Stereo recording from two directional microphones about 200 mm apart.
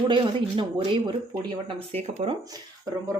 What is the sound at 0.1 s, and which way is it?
Speech, 25° right (ahead or behind).